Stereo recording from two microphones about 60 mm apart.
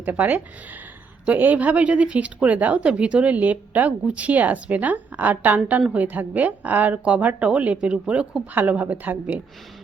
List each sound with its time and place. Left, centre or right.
0.0 s speech: right